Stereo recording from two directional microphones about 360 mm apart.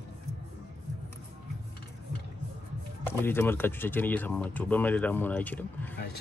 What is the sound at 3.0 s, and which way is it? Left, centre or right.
Speech, centre.